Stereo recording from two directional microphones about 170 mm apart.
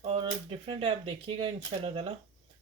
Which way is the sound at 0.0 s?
35° right (ahead or behind).